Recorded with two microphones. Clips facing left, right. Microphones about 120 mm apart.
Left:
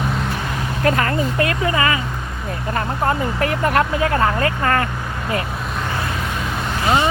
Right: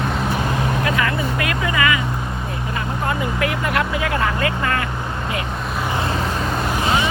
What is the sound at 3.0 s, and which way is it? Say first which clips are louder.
Speech: left 2 dB; 40° left (ahead or behind).